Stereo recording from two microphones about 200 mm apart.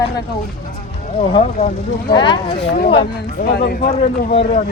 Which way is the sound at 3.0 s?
55° left (ahead or behind).